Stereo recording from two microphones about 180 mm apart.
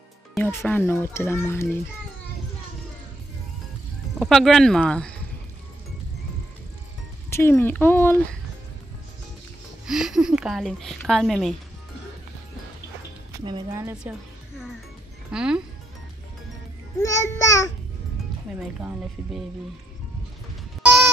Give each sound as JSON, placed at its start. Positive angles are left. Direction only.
{"t": 0.4, "sound": "a child's voice", "side_deg": 10}
{"t": 4.2, "sound": "a woman's voice", "side_deg": 0}
{"t": 7.2, "sound": "a child's voice", "side_deg": 15}
{"t": 9.8, "sound": "a woman's voice", "side_deg": -5}
{"t": 13.4, "sound": "speech", "side_deg": -25}
{"t": 15.3, "sound": "a woman's voice", "side_deg": -5}
{"t": 17.0, "sound": "a child's voice", "side_deg": 15}
{"t": 18.8, "sound": "a woman's voice", "side_deg": -5}
{"t": 20.8, "sound": "music", "side_deg": -5}